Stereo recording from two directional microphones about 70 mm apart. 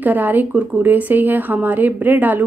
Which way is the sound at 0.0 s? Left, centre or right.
Right.